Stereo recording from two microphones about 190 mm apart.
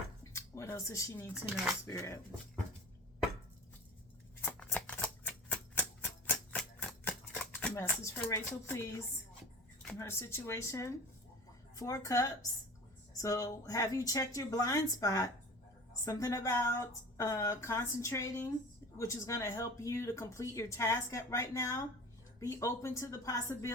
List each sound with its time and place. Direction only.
0.3 s speech: 15° left (ahead or behind)
1.3 s speech: 5° right (ahead or behind)
1.9 s speech: 15° left (ahead or behind)
4.4 s shuffling cards: 5° left (ahead or behind)
10.0 s speech: 15° left (ahead or behind)